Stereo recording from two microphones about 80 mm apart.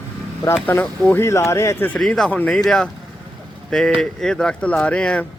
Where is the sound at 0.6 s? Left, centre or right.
Left.